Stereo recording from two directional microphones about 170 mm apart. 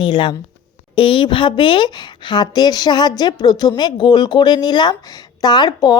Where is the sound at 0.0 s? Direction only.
30° left (ahead or behind).